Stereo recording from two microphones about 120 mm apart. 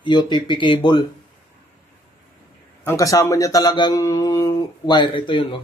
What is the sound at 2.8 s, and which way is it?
Speech, 25° left (ahead or behind).